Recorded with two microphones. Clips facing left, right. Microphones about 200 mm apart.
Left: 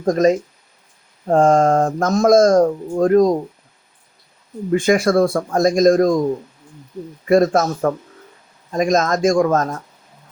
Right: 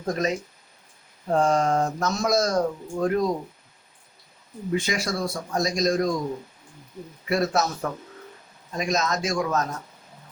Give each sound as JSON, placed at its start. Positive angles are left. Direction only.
{"t": 0.0, "sound": "speech", "side_deg": 45}
{"t": 4.7, "sound": "speech", "side_deg": 50}
{"t": 7.3, "sound": "speech", "side_deg": 50}